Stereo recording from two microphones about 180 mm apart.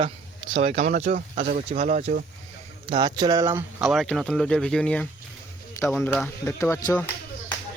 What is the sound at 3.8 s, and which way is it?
Speech, centre (ahead or behind).